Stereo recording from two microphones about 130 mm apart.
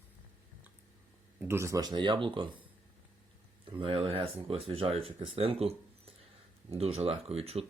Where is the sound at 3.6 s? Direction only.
40° right (ahead or behind).